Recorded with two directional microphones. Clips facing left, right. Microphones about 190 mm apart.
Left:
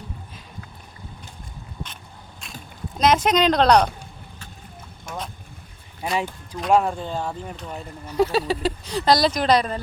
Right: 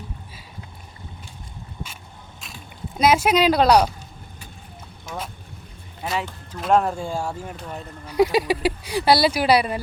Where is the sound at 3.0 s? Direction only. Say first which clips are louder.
Right 1 dB; 10° right (ahead or behind).